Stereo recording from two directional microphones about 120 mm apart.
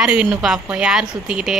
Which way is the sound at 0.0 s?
5° right (ahead or behind).